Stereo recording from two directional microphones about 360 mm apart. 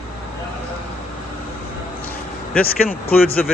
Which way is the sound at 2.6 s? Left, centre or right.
Left.